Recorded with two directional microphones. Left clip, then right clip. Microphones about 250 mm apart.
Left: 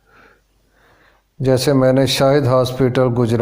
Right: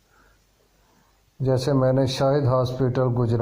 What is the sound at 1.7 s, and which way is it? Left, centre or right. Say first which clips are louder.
Speech: left 7 dB; left.